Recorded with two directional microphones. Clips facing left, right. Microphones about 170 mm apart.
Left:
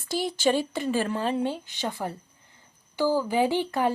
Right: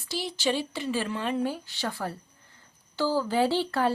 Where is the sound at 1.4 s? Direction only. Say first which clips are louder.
Left 1 dB; 25° left (ahead or behind).